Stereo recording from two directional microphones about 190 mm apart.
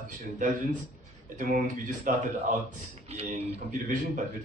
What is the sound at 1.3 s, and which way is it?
Speech, 40° right (ahead or behind).